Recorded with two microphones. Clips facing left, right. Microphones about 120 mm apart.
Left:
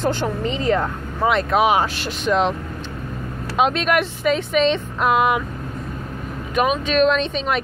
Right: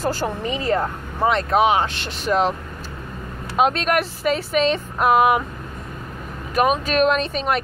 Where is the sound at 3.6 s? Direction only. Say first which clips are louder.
Even; centre (ahead or behind).